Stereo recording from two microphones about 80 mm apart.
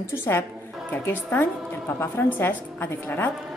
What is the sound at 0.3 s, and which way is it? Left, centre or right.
Speech, left.